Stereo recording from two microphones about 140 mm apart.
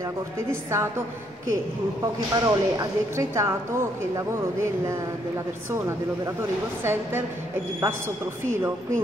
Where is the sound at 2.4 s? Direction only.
25° right (ahead or behind).